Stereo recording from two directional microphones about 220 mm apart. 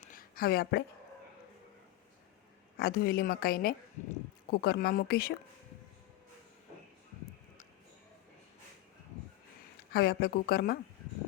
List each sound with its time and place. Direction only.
0.0 s a sound: 40° left (ahead or behind)
2.7 s speech: 45° left (ahead or behind)
9.9 s speech: 45° left (ahead or behind)